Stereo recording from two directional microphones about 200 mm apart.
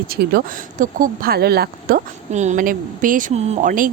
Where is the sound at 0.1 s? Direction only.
50° right (ahead or behind).